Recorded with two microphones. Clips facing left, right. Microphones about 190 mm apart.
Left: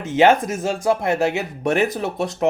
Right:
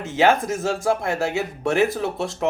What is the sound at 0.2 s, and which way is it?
Speech, 20° left (ahead or behind).